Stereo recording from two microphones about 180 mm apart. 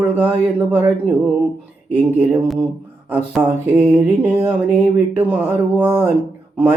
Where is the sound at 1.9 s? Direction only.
10° right (ahead or behind).